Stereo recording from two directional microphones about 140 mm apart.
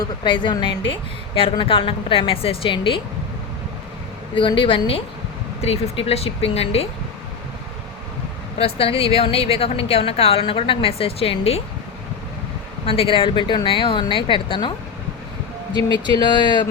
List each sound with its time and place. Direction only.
0.0 s a woman's voice: 35° left (ahead or behind)
4.4 s a woman's voice: 35° left (ahead or behind)
8.5 s a woman's voice: 45° left (ahead or behind)
12.8 s a woman's voice: 40° left (ahead or behind)
16.0 s a woman's voice: 30° left (ahead or behind)